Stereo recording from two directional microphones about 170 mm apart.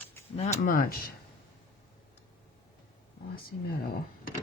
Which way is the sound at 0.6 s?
55° left (ahead or behind).